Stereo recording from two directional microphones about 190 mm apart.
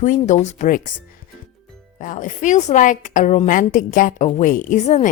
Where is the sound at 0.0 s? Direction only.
40° left (ahead or behind).